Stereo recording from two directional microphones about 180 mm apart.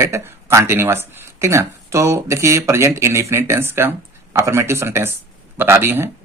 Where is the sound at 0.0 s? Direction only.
15° right (ahead or behind).